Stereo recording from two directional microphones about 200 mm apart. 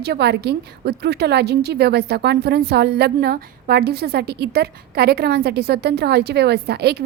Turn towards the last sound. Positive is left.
turn(degrees=-55)  # may be behind; listen again after turning